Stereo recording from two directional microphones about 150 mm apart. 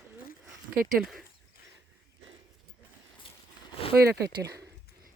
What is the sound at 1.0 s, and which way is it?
Speech, centre (ahead or behind).